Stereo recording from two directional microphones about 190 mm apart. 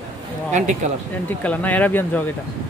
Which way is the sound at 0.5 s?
40° right (ahead or behind).